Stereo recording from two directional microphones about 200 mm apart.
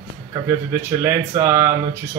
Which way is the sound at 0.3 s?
15° right (ahead or behind).